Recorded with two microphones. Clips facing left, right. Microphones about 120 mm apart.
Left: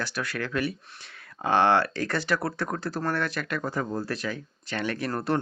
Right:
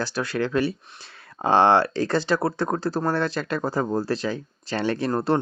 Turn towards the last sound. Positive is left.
turn(degrees=-30)  # may be behind; listen again after turning